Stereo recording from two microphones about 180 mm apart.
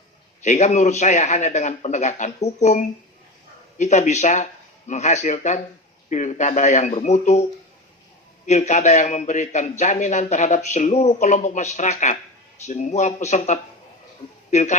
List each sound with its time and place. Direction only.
0.4 s speech: 40° left (ahead or behind)
8.4 s speech: 40° left (ahead or behind)